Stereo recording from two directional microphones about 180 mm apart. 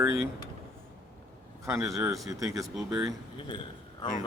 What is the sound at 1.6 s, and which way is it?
Speech, 15° right (ahead or behind).